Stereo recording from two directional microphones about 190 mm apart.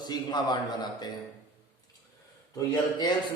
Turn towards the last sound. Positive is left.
turn(degrees=20)  # may be behind; listen again after turning